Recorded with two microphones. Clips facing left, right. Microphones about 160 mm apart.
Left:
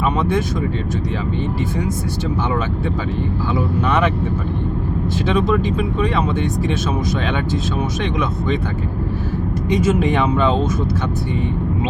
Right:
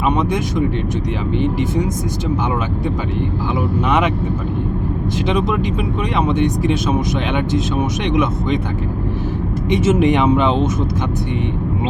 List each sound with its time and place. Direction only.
0.2 s vehicle: 15° right (ahead or behind)
3.8 s speech: 15° right (ahead or behind)
5.3 s speech: 15° right (ahead or behind)
8.1 s speech: 15° right (ahead or behind)
9.6 s speech: 25° right (ahead or behind)